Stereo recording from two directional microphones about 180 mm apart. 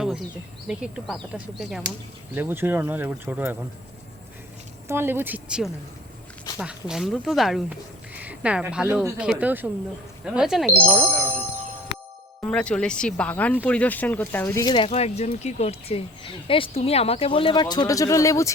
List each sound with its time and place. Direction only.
0.7 s speech: 5° right (ahead or behind)
4.9 s speech: 10° right (ahead or behind)
12.4 s speech: 5° left (ahead or behind); by 14.8 s 20° left (ahead or behind)
14.8 s speech: 35° left (ahead or behind); by 18.5 s 15° left (ahead or behind)